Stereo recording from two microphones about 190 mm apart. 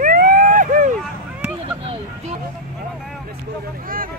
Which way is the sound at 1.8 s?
35° right (ahead or behind).